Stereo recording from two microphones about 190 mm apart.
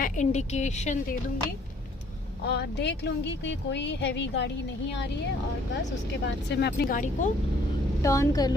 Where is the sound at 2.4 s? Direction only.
65° left (ahead or behind).